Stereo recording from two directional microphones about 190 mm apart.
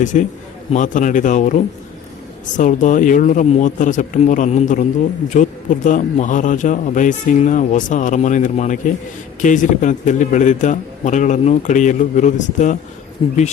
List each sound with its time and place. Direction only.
0.0 s a man's voice: 40° left (ahead or behind)
13.2 s speech: 30° left (ahead or behind)